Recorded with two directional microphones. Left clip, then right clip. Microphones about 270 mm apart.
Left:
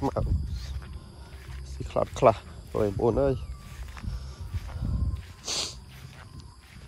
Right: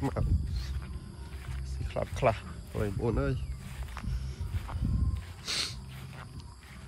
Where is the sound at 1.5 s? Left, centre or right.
Left.